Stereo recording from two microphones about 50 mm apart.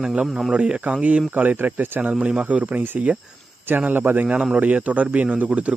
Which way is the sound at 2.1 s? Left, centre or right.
Right.